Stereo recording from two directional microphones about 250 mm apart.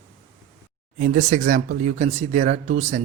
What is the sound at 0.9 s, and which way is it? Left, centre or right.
Speech, right.